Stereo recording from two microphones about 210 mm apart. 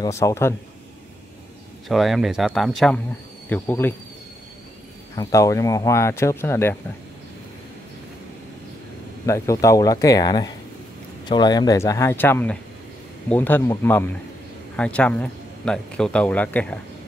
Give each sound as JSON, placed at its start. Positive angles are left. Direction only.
{"t": 0.0, "sound": "speech", "side_deg": 15}
{"t": 1.9, "sound": "speech", "side_deg": 0}
{"t": 5.1, "sound": "speech", "side_deg": 15}
{"t": 9.2, "sound": "speech", "side_deg": 15}